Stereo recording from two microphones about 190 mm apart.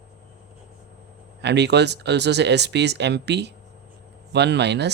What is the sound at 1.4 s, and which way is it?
Speech, 65° right (ahead or behind).